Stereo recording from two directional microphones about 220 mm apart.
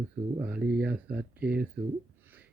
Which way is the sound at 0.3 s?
5° right (ahead or behind).